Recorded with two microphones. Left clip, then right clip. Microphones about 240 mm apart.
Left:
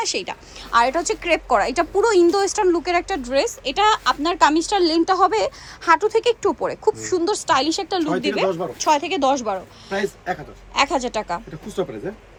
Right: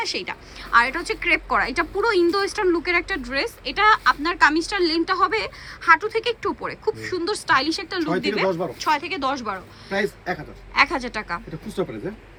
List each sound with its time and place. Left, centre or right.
0.0 s speech: centre
8.4 s a man's voice: centre
8.8 s speech: centre
9.9 s a man's voice: centre
10.8 s speech: centre
11.8 s a man's voice: centre